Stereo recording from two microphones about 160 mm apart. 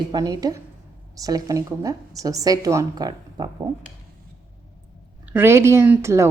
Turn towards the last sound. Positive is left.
turn(degrees=-15)  # may be behind; listen again after turning